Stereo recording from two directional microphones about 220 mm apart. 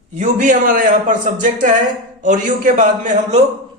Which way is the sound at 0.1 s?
35° right (ahead or behind).